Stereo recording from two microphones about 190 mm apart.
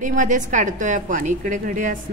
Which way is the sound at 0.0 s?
40° right (ahead or behind).